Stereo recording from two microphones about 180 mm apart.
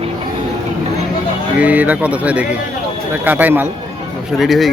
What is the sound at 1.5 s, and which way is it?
Speech, 10° right (ahead or behind).